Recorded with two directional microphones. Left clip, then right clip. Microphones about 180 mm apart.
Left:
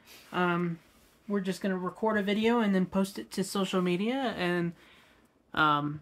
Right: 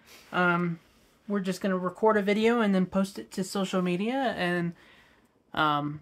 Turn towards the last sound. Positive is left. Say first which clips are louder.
# even
turn(degrees=-10)  # may be behind; listen again after turning